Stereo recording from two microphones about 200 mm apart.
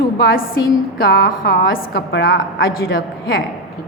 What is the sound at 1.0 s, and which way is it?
A woman's voice, 55° left (ahead or behind).